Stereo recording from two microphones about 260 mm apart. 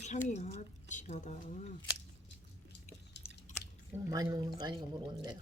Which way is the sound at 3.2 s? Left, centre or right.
Left.